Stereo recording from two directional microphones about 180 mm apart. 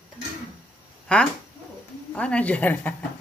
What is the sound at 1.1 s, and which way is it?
A woman's voice, 5° left (ahead or behind).